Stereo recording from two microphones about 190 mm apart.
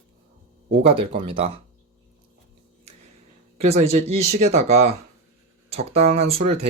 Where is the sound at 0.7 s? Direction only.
30° right (ahead or behind).